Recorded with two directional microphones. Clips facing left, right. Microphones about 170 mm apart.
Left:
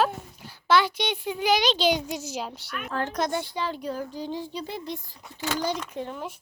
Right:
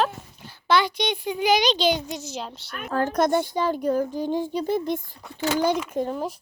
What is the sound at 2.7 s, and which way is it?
A child's voice, 40° right (ahead or behind).